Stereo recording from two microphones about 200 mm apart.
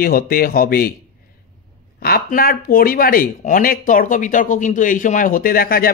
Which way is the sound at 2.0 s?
45° left (ahead or behind).